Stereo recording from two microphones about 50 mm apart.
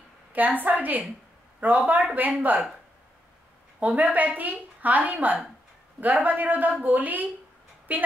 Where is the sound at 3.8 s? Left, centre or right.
Right.